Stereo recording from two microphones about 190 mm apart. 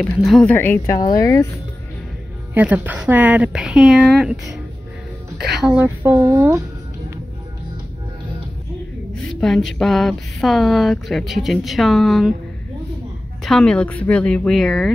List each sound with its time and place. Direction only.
0.0 s speech: 5° left (ahead or behind)
0.9 s speech: 20° left (ahead or behind)
2.5 s speech: 10° right (ahead or behind)
9.4 s speech: centre (ahead or behind)
13.4 s speech: centre (ahead or behind)